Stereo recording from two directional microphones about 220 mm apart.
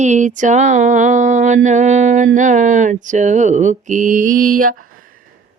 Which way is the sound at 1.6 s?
35° right (ahead or behind).